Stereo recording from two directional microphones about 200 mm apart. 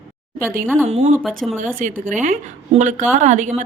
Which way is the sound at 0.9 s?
30° right (ahead or behind).